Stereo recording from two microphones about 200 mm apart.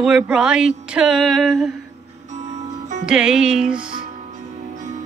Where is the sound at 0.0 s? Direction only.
5° right (ahead or behind).